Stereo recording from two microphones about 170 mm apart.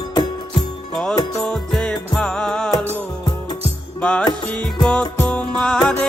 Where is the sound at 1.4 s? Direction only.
5° left (ahead or behind).